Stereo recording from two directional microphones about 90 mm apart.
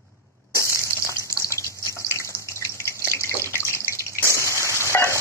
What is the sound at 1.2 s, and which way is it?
Water, 35° left (ahead or behind).